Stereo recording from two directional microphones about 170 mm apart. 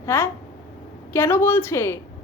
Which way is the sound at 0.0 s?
15° left (ahead or behind).